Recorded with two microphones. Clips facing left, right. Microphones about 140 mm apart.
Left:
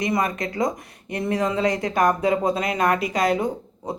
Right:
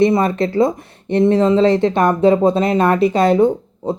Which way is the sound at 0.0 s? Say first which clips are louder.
Right 9 dB; 30° right (ahead or behind).